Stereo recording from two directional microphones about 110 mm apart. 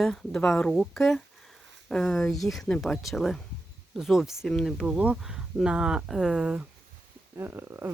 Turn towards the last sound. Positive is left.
turn(degrees=-20)  # may be behind; listen again after turning